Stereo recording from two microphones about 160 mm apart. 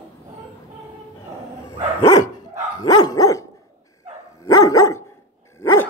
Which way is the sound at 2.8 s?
25° left (ahead or behind).